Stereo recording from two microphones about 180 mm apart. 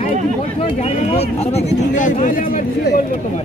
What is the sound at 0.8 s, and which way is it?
Speech, 35° left (ahead or behind).